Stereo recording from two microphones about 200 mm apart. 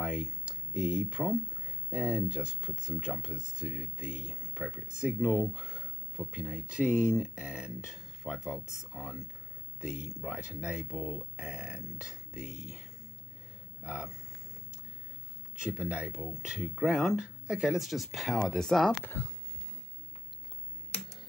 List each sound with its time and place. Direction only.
0.0 s speech: 5° right (ahead or behind)
10.2 s speech: centre (ahead or behind)
13.8 s speech: 5° right (ahead or behind)
15.6 s speech: 5° right (ahead or behind)
18.9 s speech: 15° left (ahead or behind)